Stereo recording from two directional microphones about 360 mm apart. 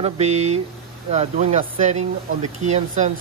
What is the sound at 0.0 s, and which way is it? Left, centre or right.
Speech, centre.